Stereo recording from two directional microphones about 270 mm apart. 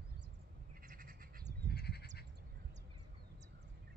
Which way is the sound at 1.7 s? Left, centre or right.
Left.